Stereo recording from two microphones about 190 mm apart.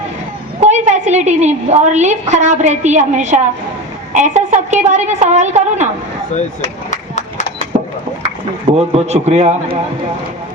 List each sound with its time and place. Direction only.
0.6 s a woman's voice: 35° right (ahead or behind)
6.3 s a sound: 40° left (ahead or behind)
8.7 s a woman's voice: 35° right (ahead or behind)